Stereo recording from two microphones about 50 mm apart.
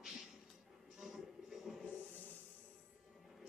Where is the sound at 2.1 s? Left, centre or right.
Left.